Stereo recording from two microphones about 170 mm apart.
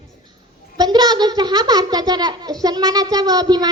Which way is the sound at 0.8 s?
25° right (ahead or behind).